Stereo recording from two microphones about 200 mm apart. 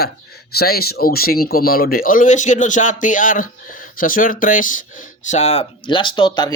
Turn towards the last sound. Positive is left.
turn(degrees=25)  # may be behind; listen again after turning